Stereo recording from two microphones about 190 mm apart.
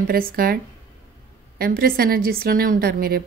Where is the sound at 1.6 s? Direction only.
50° right (ahead or behind).